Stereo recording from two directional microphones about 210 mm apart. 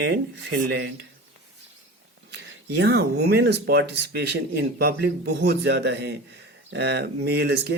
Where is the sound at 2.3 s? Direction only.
55° right (ahead or behind).